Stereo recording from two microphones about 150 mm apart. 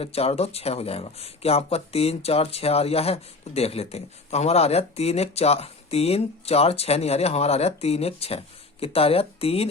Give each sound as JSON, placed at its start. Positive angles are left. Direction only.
{"t": 0.0, "sound": "speech", "side_deg": 40}